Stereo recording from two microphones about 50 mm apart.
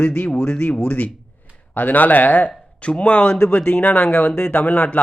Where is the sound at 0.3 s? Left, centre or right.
Centre.